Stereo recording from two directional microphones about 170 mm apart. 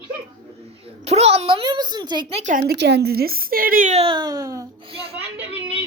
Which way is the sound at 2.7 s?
80° right.